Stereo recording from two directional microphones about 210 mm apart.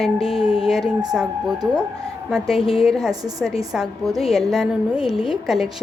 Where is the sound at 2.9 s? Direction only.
Centre (ahead or behind).